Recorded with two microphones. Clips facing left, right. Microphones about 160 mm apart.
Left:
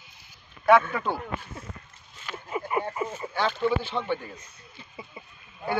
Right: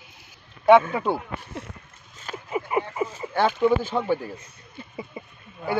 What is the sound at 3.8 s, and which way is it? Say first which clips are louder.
Speech: right 5 dB; 40° right (ahead or behind).